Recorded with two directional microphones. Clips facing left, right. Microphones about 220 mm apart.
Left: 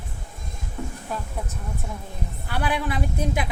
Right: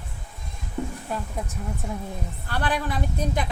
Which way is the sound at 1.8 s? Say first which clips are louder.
Right 6 dB; 15° right (ahead or behind).